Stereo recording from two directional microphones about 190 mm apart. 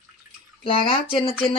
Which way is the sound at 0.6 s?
30° left (ahead or behind).